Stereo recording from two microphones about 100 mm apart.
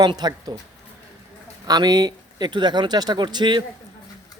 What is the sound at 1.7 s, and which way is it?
A man's voice, 40° right (ahead or behind).